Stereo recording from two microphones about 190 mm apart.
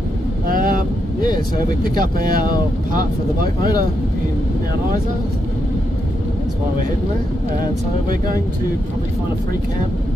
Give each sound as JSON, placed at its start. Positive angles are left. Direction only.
{"t": 0.5, "sound": "vehicle", "side_deg": -45}
{"t": 1.8, "sound": "speech", "side_deg": -50}